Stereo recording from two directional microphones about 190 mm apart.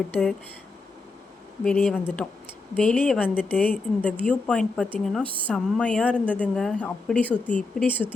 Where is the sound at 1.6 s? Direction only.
5° left (ahead or behind).